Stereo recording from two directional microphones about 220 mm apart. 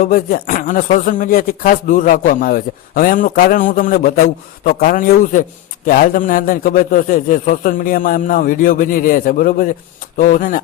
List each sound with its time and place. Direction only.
0.0 s a man's voice: 40° left (ahead or behind)